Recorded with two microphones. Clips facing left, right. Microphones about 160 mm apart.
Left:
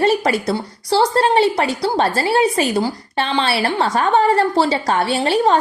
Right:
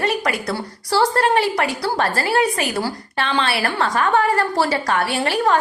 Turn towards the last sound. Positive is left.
turn(degrees=25)  # may be behind; listen again after turning